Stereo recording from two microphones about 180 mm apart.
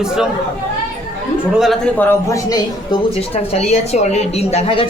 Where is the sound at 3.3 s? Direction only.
35° left (ahead or behind).